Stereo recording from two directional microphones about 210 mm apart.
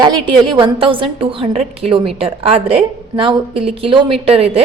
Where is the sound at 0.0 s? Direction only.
20° right (ahead or behind).